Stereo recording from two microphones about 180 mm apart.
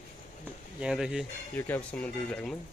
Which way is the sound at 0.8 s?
5° right (ahead or behind).